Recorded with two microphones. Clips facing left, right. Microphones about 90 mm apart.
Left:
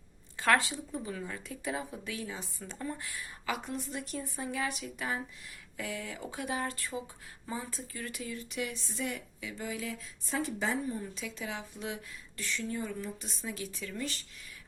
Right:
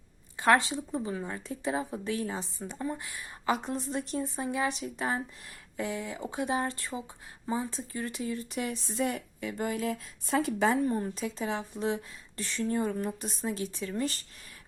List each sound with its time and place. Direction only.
0.3 s a woman's voice: 20° right (ahead or behind); by 2.5 s 40° right (ahead or behind)
2.6 s a woman's voice: 20° right (ahead or behind)
3.4 s a woman's voice: 35° right (ahead or behind); by 11.1 s 55° right (ahead or behind)
11.1 s a woman's voice: 35° right (ahead or behind)